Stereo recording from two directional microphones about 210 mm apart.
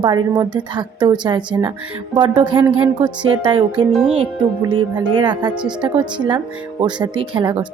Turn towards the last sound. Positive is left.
turn(degrees=-20)  # may be behind; listen again after turning